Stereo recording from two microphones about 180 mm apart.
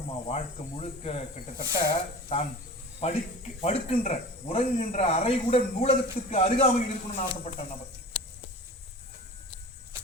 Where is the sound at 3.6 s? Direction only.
35° left (ahead or behind).